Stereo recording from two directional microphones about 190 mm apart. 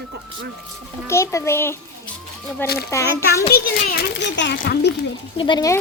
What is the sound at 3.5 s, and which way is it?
A child's voice, 65° left (ahead or behind).